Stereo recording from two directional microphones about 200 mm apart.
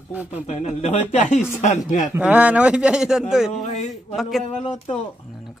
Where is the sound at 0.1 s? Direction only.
5° right (ahead or behind).